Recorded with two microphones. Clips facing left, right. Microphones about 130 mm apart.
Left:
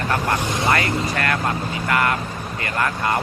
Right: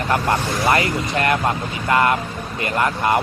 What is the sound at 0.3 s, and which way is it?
Speech, 20° left (ahead or behind).